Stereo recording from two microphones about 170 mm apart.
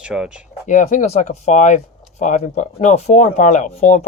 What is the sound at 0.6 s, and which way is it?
Speech, 50° left (ahead or behind).